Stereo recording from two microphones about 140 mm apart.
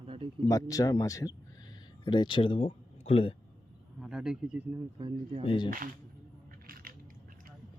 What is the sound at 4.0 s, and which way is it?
Speech, 5° right (ahead or behind).